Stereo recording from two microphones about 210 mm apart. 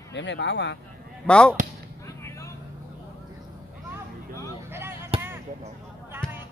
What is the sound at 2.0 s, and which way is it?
Vehicle, 15° left (ahead or behind).